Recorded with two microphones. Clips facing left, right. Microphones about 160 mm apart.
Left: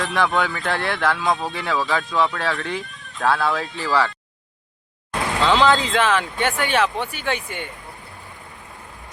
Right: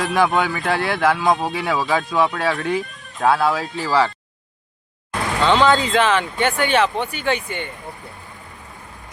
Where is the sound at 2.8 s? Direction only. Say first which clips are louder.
Right 6 dB; 45° right (ahead or behind).